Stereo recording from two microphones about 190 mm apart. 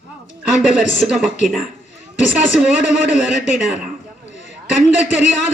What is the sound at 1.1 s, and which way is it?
Speech, 5° right (ahead or behind).